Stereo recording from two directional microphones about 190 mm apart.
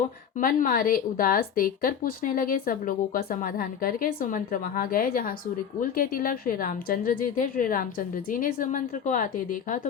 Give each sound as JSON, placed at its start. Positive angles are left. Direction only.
{"t": 0.3, "sound": "a woman's voice", "side_deg": 45}